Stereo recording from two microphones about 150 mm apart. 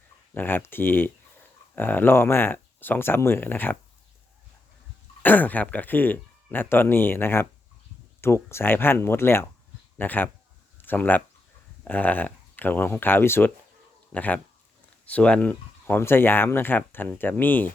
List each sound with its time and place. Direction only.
0.3 s speech: 15° left (ahead or behind)
5.2 s speech: 10° left (ahead or behind)
10.8 s a sound: 10° left (ahead or behind)
11.9 s speech: 10° left (ahead or behind)